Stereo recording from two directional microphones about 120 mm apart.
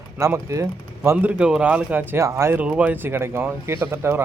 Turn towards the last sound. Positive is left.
turn(degrees=-20)  # may be behind; listen again after turning